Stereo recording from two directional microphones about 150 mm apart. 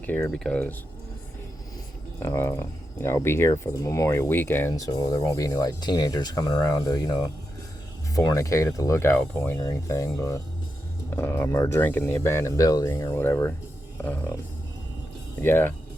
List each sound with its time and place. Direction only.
0.0 s speech: 10° left (ahead or behind)
2.1 s speech: 20° left (ahead or behind)
15.4 s speech: 15° left (ahead or behind)